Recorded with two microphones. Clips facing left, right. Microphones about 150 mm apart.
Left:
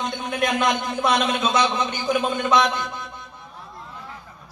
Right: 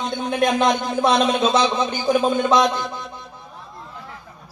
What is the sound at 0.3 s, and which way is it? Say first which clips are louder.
A man's voice: right 4 dB; 30° right (ahead or behind).